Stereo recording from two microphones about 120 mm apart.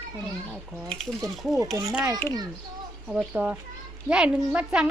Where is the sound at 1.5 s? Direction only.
Centre (ahead or behind).